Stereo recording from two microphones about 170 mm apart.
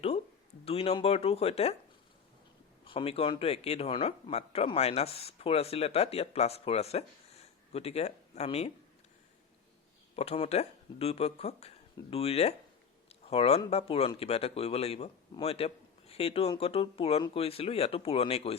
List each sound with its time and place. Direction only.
0.6 s speech: 35° left (ahead or behind)
2.8 s speech: 30° left (ahead or behind)
10.2 s speech: 35° left (ahead or behind)